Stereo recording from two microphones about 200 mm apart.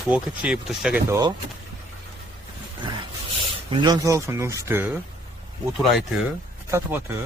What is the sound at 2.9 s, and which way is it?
Speech, 25° right (ahead or behind).